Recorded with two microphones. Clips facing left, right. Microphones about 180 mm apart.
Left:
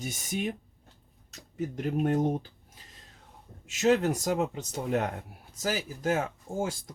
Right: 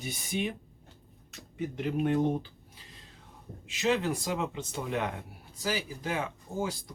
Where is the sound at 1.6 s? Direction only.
40° left (ahead or behind).